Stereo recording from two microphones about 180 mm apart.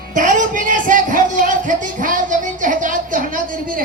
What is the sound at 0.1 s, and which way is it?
Speech, 45° right (ahead or behind).